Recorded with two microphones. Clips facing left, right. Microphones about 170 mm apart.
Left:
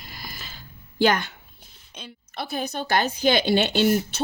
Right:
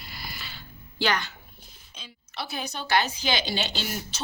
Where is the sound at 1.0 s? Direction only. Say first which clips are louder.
Left 6 dB; 50° left (ahead or behind).